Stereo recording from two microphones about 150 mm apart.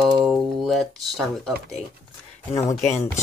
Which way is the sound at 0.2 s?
Centre (ahead or behind).